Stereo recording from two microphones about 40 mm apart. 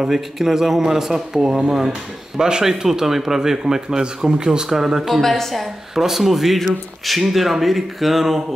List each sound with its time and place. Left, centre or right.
0.0 s speech: centre
5.2 s speech: centre